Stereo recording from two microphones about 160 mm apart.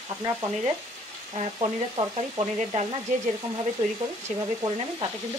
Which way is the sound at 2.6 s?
45° right (ahead or behind).